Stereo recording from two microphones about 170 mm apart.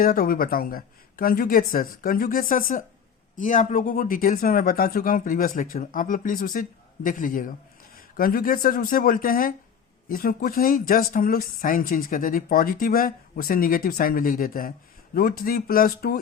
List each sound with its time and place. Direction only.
0.0 s speech: 55° left (ahead or behind)